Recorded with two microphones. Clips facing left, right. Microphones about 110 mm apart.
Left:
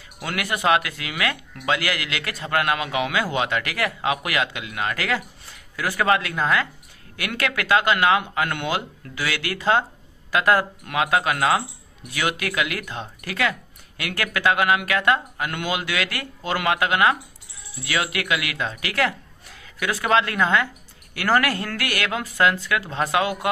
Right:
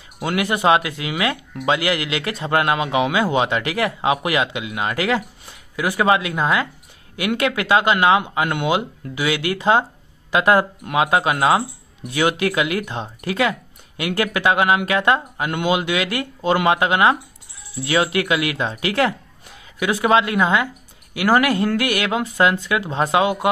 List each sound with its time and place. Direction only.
0.2 s speech: 25° right (ahead or behind)